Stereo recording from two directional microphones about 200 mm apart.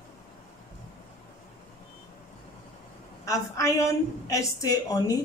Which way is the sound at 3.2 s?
15° left (ahead or behind).